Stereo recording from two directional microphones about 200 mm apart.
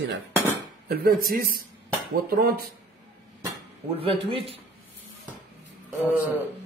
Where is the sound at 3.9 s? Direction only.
25° right (ahead or behind).